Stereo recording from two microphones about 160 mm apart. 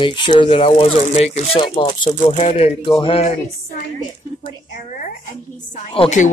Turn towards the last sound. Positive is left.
turn(degrees=50)  # may be behind; listen again after turning